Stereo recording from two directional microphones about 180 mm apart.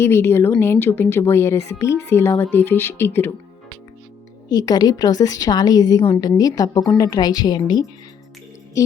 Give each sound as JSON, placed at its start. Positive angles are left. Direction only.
{"t": 0.0, "sound": "a woman's voice", "side_deg": 15}
{"t": 4.4, "sound": "a woman's voice", "side_deg": 20}